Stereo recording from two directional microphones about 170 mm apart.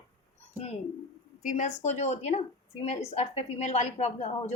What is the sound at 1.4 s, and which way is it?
Speech, 45° left (ahead or behind).